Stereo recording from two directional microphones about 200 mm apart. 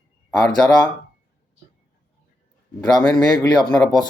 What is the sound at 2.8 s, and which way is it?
Speech, 20° left (ahead or behind).